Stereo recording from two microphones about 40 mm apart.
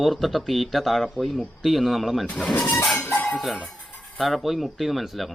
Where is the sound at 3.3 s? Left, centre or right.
Centre.